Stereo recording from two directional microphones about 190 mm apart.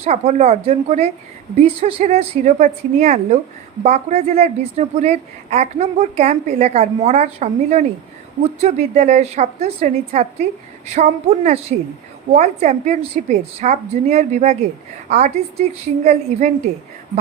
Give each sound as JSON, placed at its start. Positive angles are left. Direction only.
{"t": 0.0, "sound": "speech", "side_deg": -35}